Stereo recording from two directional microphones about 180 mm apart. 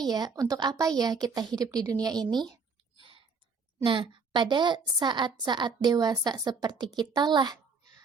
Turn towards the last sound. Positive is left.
turn(degrees=-25)  # may be behind; listen again after turning